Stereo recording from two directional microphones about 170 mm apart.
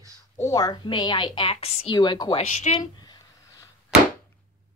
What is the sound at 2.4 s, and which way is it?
Speech, 45° left (ahead or behind).